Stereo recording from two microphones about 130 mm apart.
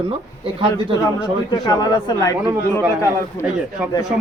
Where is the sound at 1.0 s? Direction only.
30° left (ahead or behind).